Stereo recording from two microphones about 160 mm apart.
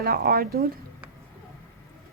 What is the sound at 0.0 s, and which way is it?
Speech, 70° right (ahead or behind).